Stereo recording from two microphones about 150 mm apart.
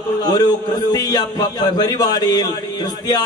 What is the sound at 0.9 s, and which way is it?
Speech, 25° left (ahead or behind).